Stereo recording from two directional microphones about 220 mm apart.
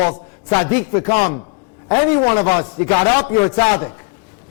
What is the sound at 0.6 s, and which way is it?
A man's voice, 10° left (ahead or behind).